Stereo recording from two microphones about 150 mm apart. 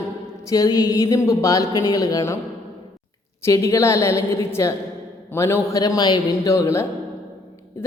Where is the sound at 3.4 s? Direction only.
20° left (ahead or behind).